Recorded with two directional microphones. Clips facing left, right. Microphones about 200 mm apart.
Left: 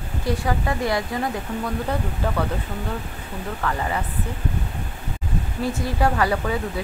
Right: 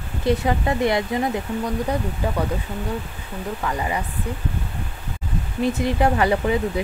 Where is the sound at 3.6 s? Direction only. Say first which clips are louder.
Even; 15° right (ahead or behind).